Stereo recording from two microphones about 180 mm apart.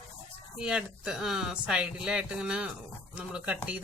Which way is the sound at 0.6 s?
5° right (ahead or behind).